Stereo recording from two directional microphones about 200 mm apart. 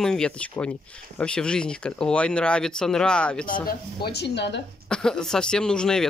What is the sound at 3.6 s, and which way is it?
Speech, 55° left (ahead or behind).